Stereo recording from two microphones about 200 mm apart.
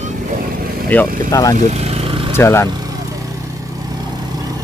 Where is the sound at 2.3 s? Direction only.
15° left (ahead or behind).